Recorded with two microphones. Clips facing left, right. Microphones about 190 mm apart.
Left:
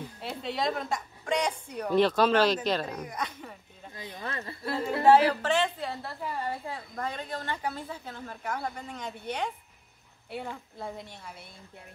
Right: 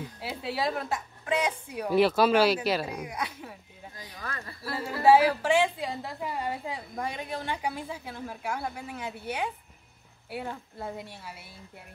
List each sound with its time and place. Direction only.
0.2 s a woman's voice: 5° right (ahead or behind)
3.9 s speech: 25° left (ahead or behind)
5.0 s a woman's voice: 10° right (ahead or behind)